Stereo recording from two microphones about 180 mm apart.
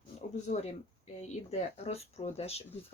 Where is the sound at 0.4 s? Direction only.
40° left (ahead or behind).